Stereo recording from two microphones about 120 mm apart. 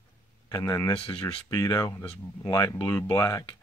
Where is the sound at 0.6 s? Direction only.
25° left (ahead or behind).